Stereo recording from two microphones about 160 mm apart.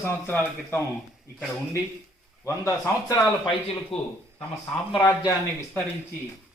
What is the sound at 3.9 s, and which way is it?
Speech, 35° left (ahead or behind).